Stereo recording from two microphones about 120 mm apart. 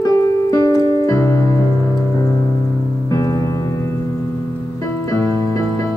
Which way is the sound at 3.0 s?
30° left (ahead or behind).